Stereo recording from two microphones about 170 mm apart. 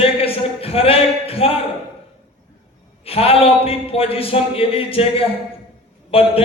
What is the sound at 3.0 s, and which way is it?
Speech, 35° left (ahead or behind).